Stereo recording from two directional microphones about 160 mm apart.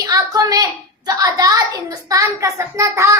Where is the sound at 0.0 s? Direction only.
20° right (ahead or behind).